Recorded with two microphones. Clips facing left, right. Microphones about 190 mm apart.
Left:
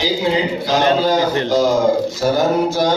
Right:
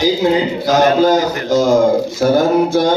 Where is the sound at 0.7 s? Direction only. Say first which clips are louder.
Right 4 dB; 45° right (ahead or behind).